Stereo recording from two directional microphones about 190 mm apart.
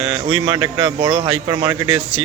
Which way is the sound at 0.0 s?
30° right (ahead or behind).